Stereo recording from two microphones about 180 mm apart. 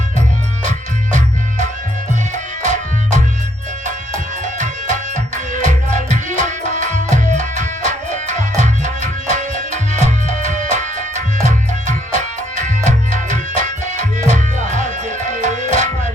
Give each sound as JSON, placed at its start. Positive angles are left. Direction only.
{"t": 0.6, "sound": "music", "side_deg": -45}
{"t": 4.4, "sound": "music", "side_deg": -45}
{"t": 12.5, "sound": "music", "side_deg": -45}